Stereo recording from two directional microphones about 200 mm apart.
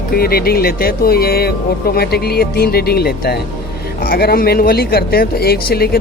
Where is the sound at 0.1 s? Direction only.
50° left (ahead or behind).